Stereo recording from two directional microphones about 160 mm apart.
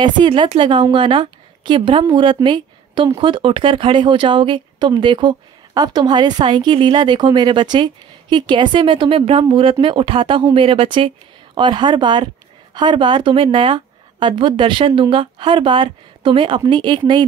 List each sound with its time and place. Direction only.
0.0 s a woman's voice: 30° right (ahead or behind)